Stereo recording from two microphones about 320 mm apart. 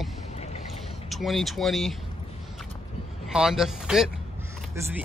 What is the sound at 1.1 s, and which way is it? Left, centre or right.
Speech, centre.